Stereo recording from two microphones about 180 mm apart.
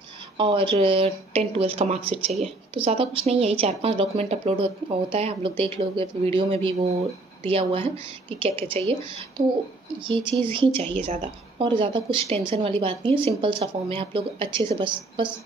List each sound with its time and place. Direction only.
0.4 s a woman's voice: 30° right (ahead or behind)
10.0 s speech: 25° right (ahead or behind)